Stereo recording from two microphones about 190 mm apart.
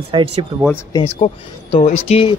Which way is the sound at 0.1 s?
30° right (ahead or behind).